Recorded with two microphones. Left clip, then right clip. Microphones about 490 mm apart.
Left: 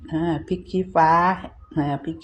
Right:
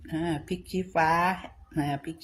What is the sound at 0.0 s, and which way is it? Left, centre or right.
Speech, right.